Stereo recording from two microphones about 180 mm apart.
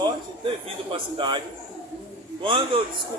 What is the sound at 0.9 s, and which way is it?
Speech, 25° right (ahead or behind).